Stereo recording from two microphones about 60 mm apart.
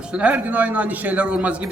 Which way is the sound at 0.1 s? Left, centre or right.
Centre.